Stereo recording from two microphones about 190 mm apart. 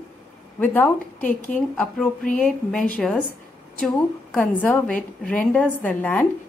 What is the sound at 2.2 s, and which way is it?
Speech, 45° left (ahead or behind).